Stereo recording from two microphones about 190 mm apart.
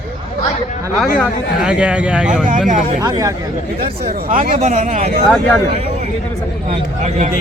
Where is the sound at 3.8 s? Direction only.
50° right (ahead or behind).